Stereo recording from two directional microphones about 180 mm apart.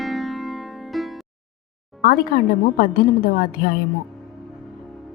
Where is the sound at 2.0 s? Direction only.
55° left (ahead or behind).